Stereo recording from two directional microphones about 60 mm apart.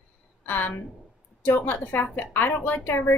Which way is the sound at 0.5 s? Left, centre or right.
Left.